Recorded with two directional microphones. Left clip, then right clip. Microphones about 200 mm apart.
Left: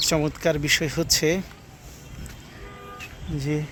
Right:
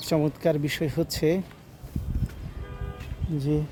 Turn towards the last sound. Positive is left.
turn(degrees=-10)  # may be behind; listen again after turning